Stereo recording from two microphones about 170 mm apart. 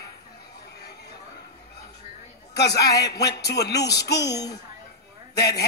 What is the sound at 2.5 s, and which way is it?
A man's voice, 80° left.